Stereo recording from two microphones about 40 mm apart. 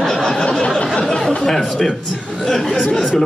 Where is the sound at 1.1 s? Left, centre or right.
Centre.